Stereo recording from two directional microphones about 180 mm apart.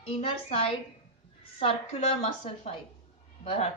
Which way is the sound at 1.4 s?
30° left (ahead or behind).